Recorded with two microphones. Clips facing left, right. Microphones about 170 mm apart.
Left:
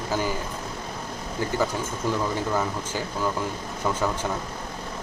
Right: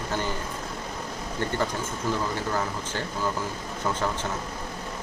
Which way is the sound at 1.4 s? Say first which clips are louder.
Left 2 dB; 5° left (ahead or behind).